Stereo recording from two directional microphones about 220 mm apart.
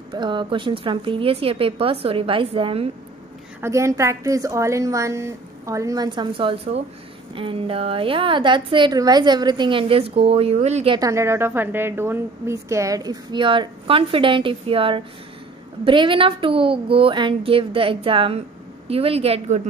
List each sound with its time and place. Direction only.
0.1 s a woman's voice: 20° right (ahead or behind)
3.6 s a woman's voice: 15° right (ahead or behind); by 11.0 s 30° right (ahead or behind)
11.0 s a woman's voice: 15° right (ahead or behind)